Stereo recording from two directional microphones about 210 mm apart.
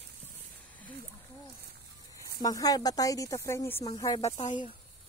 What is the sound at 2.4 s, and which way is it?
Speech, 15° left (ahead or behind).